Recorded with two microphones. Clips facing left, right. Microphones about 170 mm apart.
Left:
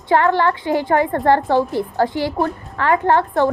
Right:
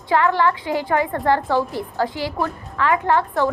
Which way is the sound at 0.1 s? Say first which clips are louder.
Left 2 dB; 25° left (ahead or behind).